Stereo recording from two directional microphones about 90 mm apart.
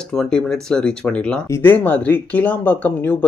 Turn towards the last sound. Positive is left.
turn(degrees=20)  # may be behind; listen again after turning